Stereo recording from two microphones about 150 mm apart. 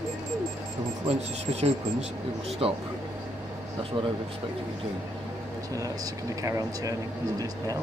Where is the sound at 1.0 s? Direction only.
45° right (ahead or behind).